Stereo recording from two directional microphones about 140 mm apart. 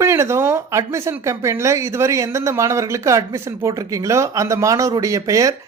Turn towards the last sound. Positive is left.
turn(degrees=-25)  # may be behind; listen again after turning